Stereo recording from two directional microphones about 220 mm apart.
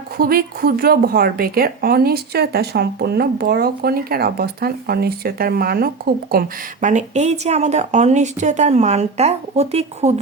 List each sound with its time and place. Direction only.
0.2 s a woman's voice: 40° right (ahead or behind)
6.8 s speech: 30° right (ahead or behind)